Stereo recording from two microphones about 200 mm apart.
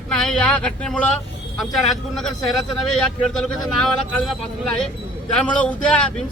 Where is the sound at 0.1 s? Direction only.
5° left (ahead or behind).